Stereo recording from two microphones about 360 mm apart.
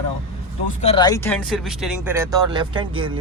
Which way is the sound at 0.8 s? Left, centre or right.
Centre.